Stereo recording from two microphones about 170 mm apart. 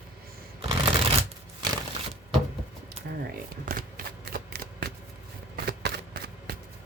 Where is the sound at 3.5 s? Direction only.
60° right (ahead or behind).